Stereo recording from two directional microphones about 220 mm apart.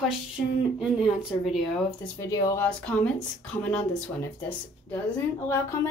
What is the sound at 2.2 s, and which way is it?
Speech, 15° left (ahead or behind).